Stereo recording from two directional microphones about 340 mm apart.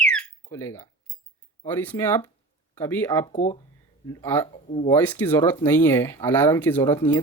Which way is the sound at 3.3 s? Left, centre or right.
Centre.